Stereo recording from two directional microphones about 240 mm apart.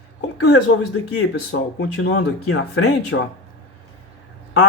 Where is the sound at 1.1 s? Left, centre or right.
Left.